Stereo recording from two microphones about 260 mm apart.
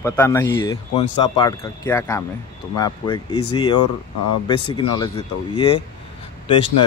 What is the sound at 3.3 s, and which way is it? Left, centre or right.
Speech, left.